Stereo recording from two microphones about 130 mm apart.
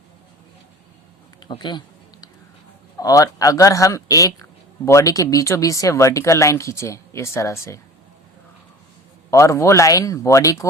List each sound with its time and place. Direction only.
1.5 s speech: 35° left (ahead or behind)
3.0 s speech: 30° left (ahead or behind)
9.3 s speech: 20° left (ahead or behind)